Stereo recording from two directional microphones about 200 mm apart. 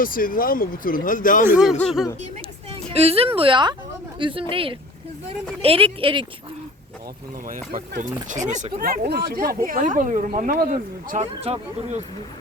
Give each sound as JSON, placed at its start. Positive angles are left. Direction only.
{"t": 0.0, "sound": "speech", "side_deg": 45}
{"t": 1.5, "sound": "speech", "side_deg": -5}
{"t": 2.9, "sound": "a woman's voice", "side_deg": -30}
{"t": 7.7, "sound": "speech", "side_deg": -40}